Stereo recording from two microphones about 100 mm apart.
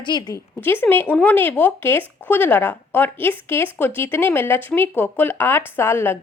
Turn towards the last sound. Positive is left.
turn(degrees=25)  # may be behind; listen again after turning